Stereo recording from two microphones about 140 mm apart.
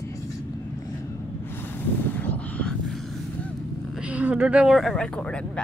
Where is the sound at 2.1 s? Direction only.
10° left (ahead or behind).